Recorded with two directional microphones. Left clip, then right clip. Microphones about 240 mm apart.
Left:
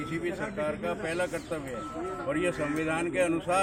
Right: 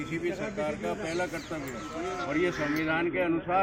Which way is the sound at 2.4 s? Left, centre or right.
Centre.